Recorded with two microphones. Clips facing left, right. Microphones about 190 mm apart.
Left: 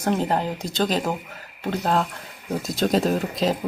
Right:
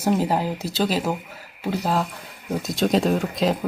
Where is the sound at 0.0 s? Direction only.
5° right (ahead or behind).